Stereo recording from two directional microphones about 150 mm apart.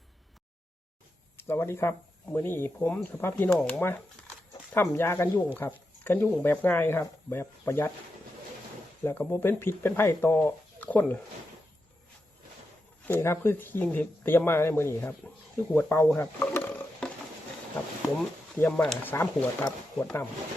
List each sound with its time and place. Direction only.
1.4 s speech: 15° left (ahead or behind)
9.0 s speech: 15° left (ahead or behind)
13.1 s speech: 15° left (ahead or behind)
18.6 s speech: 5° left (ahead or behind)
19.1 s speech: 15° left (ahead or behind)